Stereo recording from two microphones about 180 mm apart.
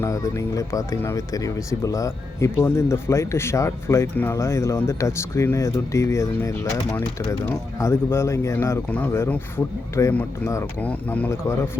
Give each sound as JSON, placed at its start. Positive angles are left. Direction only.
{"t": 0.0, "sound": "speech", "side_deg": 15}